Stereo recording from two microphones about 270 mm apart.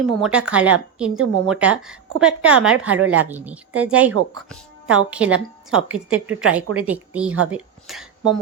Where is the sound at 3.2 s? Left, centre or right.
Centre.